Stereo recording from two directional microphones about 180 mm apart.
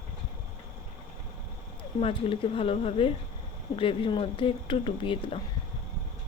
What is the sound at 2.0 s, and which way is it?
Speech, 30° left (ahead or behind).